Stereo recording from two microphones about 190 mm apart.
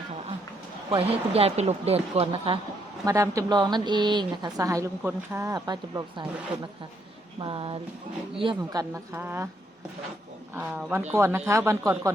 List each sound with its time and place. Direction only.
0.9 s speech: 30° right (ahead or behind)
3.1 s a woman's voice: 15° right (ahead or behind)
7.3 s a woman's voice: 30° right (ahead or behind); by 9.5 s 10° right (ahead or behind)
10.5 s a woman's voice: 10° right (ahead or behind)